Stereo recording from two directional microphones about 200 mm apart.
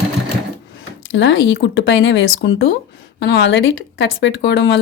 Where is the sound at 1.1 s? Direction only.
65° left (ahead or behind).